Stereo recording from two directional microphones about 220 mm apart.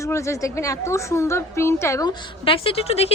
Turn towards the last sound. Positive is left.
turn(degrees=25)  # may be behind; listen again after turning